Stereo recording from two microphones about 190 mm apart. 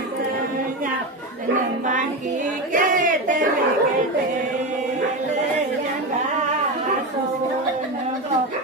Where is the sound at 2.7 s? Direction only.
45° right (ahead or behind).